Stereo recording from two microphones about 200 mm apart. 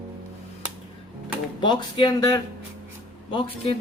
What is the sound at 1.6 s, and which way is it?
Speech, 25° left (ahead or behind).